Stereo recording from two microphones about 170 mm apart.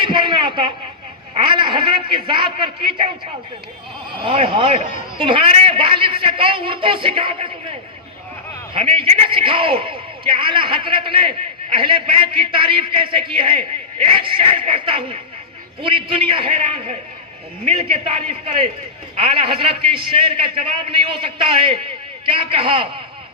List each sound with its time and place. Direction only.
0.0 s a sound: 30° right (ahead or behind)
1.3 s a man's voice: 30° right (ahead or behind)
4.2 s a man's voice: 30° right (ahead or behind)